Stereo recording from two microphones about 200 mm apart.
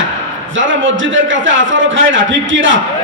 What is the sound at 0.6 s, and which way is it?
A man's voice, 75° right (ahead or behind).